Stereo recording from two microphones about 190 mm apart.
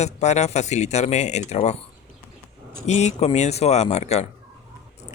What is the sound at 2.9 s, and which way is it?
Speech, 35° left (ahead or behind).